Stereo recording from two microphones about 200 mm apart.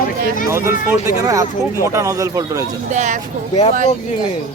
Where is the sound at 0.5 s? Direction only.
15° right (ahead or behind).